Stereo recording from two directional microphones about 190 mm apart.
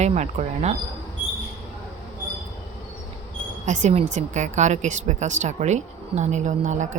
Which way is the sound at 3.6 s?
40° right (ahead or behind).